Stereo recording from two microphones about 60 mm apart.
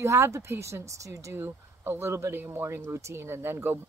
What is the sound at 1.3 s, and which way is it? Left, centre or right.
Speech, right.